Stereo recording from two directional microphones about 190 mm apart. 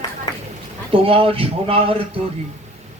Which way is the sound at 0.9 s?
30° right (ahead or behind).